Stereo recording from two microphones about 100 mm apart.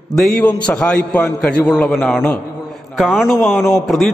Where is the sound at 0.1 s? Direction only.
5° left (ahead or behind).